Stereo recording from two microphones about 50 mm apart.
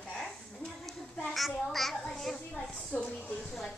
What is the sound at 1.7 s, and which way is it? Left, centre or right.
A child's voice, centre.